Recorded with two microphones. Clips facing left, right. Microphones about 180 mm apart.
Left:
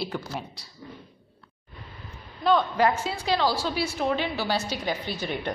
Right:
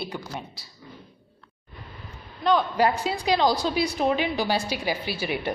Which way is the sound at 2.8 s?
35° right (ahead or behind).